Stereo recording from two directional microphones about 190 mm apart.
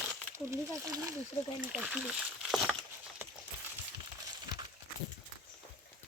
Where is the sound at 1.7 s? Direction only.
5° right (ahead or behind).